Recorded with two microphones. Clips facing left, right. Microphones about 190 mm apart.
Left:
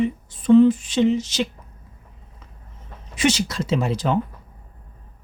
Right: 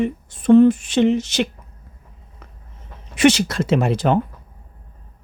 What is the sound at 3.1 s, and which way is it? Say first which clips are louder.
Speech: right 6 dB; 65° right (ahead or behind).